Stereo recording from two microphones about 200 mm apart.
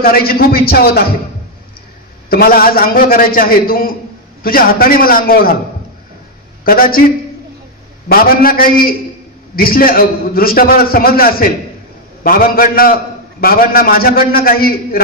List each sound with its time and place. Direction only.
0.0 s a man's voice: 50° left (ahead or behind)
2.2 s a man's voice: 50° left (ahead or behind)
6.6 s a man's voice: 45° left (ahead or behind)
8.1 s a man's voice: 45° left (ahead or behind)